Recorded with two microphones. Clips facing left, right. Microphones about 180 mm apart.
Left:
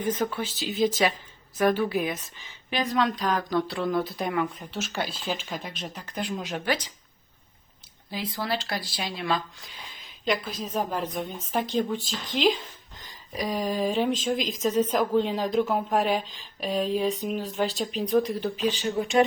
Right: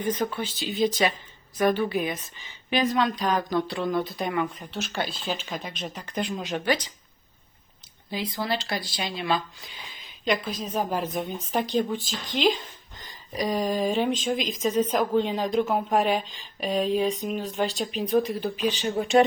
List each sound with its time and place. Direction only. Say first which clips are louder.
0.3 s speech: even; 5° left (ahead or behind)
8.1 s speech: right 1 dB; centre (ahead or behind)
18.5 s speech: even; 15° right (ahead or behind)